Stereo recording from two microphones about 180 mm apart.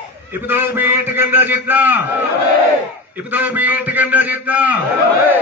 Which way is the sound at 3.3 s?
10° right (ahead or behind).